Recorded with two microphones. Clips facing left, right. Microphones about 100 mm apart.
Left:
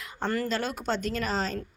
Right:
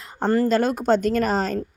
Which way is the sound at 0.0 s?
35° right (ahead or behind).